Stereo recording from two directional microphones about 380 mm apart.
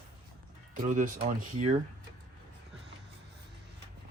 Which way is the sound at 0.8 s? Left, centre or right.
Centre.